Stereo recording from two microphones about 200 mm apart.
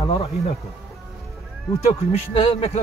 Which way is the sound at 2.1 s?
30° left (ahead or behind).